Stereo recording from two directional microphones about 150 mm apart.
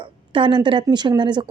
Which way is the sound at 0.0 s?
35° right (ahead or behind).